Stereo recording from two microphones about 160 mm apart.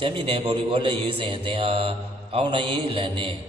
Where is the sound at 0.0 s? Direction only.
35° right (ahead or behind).